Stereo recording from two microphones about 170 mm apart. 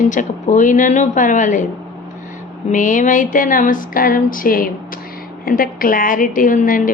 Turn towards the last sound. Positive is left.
turn(degrees=55)  # may be behind; listen again after turning